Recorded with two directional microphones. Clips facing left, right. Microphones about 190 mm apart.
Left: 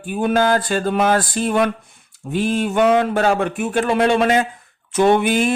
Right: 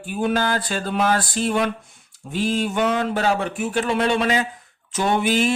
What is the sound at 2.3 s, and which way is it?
Speech, 55° left (ahead or behind).